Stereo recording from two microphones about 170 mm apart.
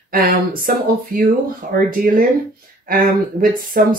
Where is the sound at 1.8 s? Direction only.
55° right (ahead or behind).